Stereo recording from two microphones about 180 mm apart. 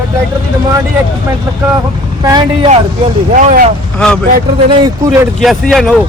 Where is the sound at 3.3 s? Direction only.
40° right (ahead or behind).